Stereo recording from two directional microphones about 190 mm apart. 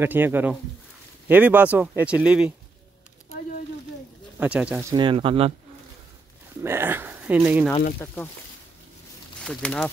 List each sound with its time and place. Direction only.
0.0 s speech: 10° right (ahead or behind)
4.4 s speech: 5° right (ahead or behind)
4.9 s speech: 25° right (ahead or behind)
6.6 s speech: 10° right (ahead or behind)
9.4 s speech: 5° left (ahead or behind)